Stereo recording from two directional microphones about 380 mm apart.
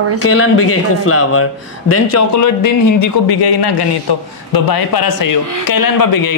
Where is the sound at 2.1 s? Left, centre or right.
Left.